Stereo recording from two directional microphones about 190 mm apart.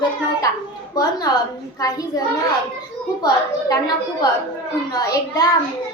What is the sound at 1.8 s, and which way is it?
Speech, 20° left (ahead or behind).